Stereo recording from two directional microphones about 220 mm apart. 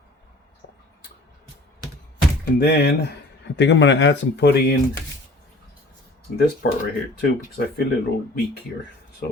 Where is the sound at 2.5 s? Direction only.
45° left (ahead or behind).